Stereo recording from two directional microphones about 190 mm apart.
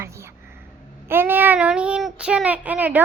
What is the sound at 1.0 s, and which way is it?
Speech, 10° right (ahead or behind).